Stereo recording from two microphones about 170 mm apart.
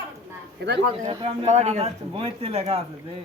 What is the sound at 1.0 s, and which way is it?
A man's voice, 30° right (ahead or behind).